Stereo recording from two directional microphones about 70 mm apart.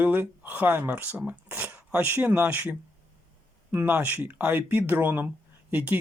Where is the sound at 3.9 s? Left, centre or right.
Right.